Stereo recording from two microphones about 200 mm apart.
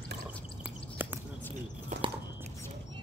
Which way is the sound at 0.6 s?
10° right (ahead or behind).